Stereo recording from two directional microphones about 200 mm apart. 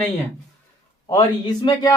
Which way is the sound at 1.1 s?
20° left (ahead or behind).